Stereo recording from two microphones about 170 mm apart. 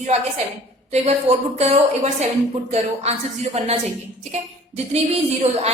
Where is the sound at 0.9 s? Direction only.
40° right (ahead or behind).